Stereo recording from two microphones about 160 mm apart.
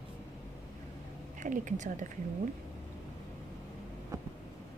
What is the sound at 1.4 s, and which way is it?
Speech, 55° right (ahead or behind).